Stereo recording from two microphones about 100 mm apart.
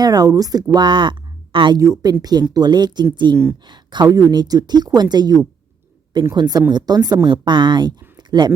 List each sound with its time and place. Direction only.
0.0 s speech: 40° right (ahead or behind)
1.8 s speech: 35° right (ahead or behind)